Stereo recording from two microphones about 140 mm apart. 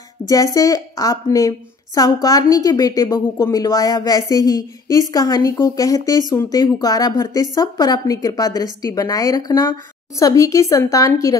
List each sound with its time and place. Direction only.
0.3 s a woman's voice: 25° left (ahead or behind)